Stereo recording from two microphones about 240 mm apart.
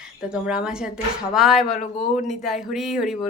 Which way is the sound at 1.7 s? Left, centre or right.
Left.